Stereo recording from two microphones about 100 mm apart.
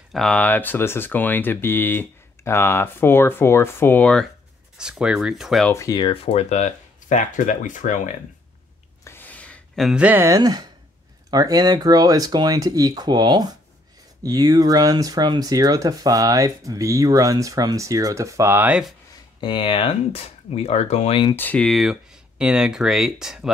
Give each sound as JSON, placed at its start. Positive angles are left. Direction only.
{"t": 0.1, "sound": "speech", "side_deg": 10}
{"t": 4.0, "sound": "speech", "side_deg": 5}
{"t": 4.7, "sound": "speech", "side_deg": -5}
{"t": 5.7, "sound": "speech", "side_deg": 30}
{"t": 5.9, "sound": "speech", "side_deg": 60}
{"t": 9.0, "sound": "a sound", "side_deg": 20}
{"t": 9.9, "sound": "speech", "side_deg": -15}
{"t": 10.2, "sound": "speech", "side_deg": -35}
{"t": 19.4, "sound": "speech", "side_deg": 55}
{"t": 21.4, "sound": "speech", "side_deg": 15}
{"t": 21.6, "sound": "speech", "side_deg": 0}